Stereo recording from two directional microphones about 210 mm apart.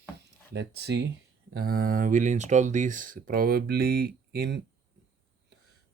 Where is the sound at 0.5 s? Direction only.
50° right (ahead or behind).